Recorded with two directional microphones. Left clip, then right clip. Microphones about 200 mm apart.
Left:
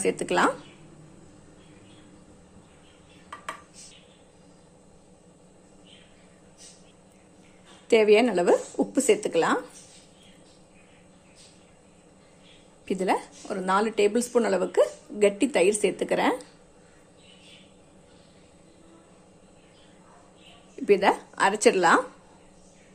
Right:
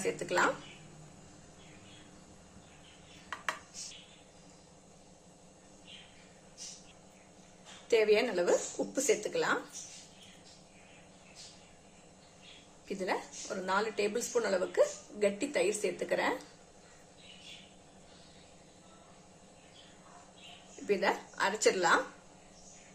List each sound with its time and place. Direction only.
0.0 s speech: 45° left (ahead or behind)
7.9 s a woman's voice: 40° left (ahead or behind)
12.8 s speech: 45° left (ahead or behind)
20.8 s a woman's voice: 40° left (ahead or behind)